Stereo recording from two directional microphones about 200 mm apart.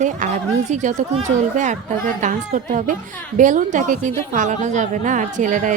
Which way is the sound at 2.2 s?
40° right (ahead or behind).